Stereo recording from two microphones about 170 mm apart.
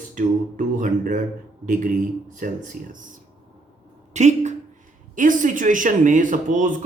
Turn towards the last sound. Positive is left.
turn(degrees=-50)  # may be behind; listen again after turning